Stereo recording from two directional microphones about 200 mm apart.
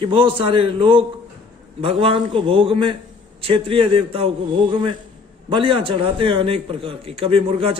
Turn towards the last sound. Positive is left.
turn(degrees=-30)  # may be behind; listen again after turning